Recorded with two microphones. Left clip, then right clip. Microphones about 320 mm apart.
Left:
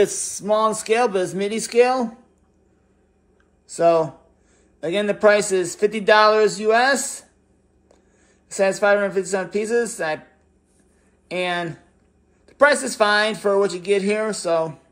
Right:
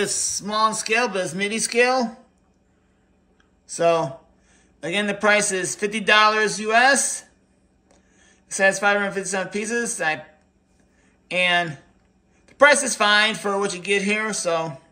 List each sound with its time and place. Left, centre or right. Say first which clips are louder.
0.1 s speech: right 4 dB; left
0.5 s speech: left 3 dB; centre
3.7 s speech: left 3 dB; centre
11.2 s speech: right 4 dB; centre